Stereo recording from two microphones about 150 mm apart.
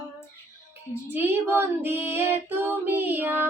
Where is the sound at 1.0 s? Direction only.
15° right (ahead or behind).